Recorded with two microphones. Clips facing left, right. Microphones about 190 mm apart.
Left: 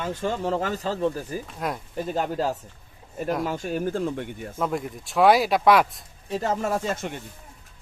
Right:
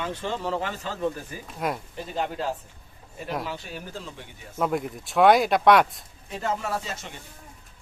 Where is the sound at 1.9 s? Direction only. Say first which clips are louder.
Left 4 dB; 45° left (ahead or behind).